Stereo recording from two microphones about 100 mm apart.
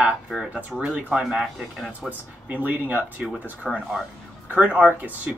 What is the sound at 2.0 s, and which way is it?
Speech, 15° right (ahead or behind).